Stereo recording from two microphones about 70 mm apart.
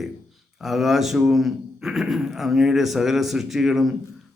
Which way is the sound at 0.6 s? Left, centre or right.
Centre.